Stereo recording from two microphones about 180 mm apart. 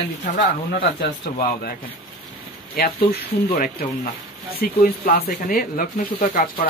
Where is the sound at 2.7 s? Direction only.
55° left (ahead or behind).